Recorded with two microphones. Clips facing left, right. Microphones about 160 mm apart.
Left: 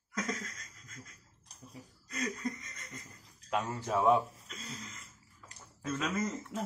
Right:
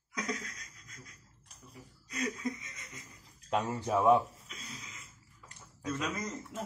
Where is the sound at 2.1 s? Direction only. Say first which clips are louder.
Right 1 dB; centre (ahead or behind).